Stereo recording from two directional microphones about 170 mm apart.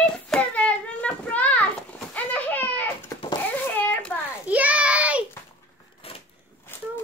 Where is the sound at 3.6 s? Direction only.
10° left (ahead or behind).